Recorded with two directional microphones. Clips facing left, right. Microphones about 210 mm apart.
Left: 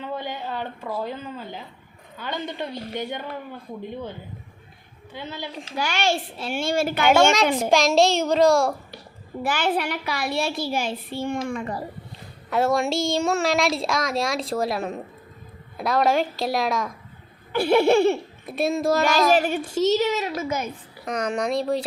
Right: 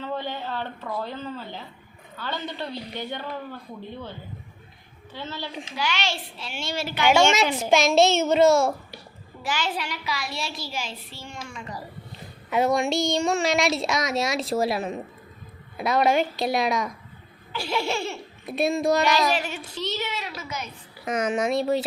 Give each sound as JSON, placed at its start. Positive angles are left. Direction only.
{"t": 0.0, "sound": "a woman's voice", "side_deg": 15}
{"t": 5.1, "sound": "a woman's voice", "side_deg": 15}
{"t": 5.7, "sound": "a child's voice", "side_deg": 50}
{"t": 7.7, "sound": "speech", "side_deg": 0}
{"t": 9.4, "sound": "a child's voice", "side_deg": 55}
{"t": 12.5, "sound": "speech", "side_deg": 0}
{"t": 17.5, "sound": "a child's voice", "side_deg": 55}
{"t": 18.4, "sound": "speech", "side_deg": 0}
{"t": 19.3, "sound": "a child's voice", "side_deg": 55}
{"t": 21.0, "sound": "speech", "side_deg": -5}